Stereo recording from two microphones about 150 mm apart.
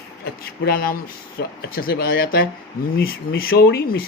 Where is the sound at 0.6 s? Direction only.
80° left.